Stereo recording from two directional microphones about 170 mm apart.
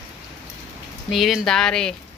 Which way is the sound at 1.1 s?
Centre (ahead or behind).